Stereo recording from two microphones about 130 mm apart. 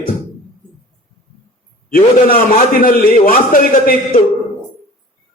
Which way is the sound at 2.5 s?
90° left.